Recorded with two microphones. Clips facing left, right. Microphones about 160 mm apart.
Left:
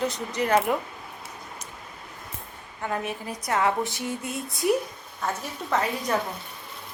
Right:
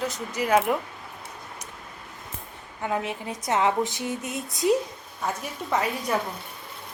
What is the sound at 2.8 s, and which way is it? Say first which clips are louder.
A woman's voice: right 2 dB; 15° right (ahead or behind).